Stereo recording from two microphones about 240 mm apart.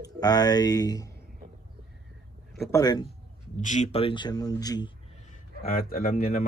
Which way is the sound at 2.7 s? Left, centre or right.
Centre.